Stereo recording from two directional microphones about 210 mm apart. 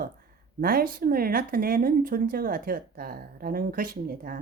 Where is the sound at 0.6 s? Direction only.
45° right (ahead or behind).